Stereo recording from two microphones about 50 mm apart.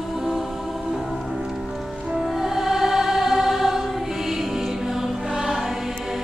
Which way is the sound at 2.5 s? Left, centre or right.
Centre.